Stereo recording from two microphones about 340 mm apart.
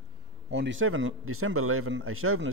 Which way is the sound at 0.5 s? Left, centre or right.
Right.